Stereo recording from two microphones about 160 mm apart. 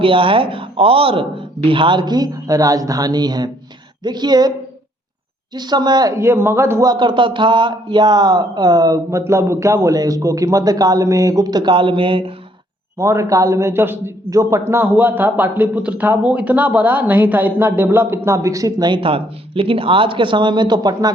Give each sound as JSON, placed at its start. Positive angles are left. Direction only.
{"t": 0.0, "sound": "speech", "side_deg": -35}
{"t": 5.5, "sound": "speech", "side_deg": -25}
{"t": 13.0, "sound": "a man's voice", "side_deg": -20}